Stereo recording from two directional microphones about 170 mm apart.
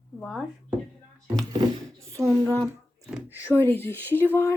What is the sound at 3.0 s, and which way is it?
Speech, 5° right (ahead or behind).